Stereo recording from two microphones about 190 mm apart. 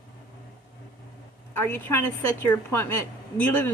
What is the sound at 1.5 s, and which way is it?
A woman's voice, 10° left (ahead or behind).